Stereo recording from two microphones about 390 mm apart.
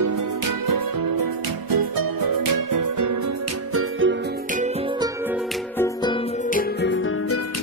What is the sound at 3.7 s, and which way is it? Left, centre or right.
Music, right.